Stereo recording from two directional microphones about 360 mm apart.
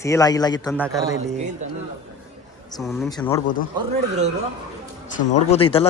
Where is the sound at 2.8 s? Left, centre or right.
Centre.